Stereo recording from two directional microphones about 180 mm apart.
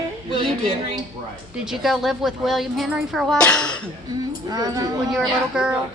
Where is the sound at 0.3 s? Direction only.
30° right (ahead or behind).